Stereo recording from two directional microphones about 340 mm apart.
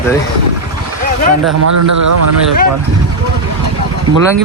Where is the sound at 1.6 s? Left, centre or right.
Right.